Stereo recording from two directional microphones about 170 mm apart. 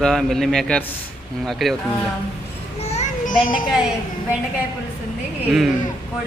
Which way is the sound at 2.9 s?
45° left (ahead or behind).